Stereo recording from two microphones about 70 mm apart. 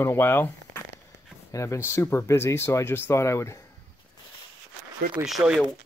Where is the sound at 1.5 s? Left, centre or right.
Left.